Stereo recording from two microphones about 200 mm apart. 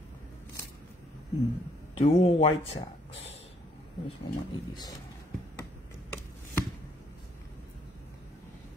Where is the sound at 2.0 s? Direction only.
30° left (ahead or behind).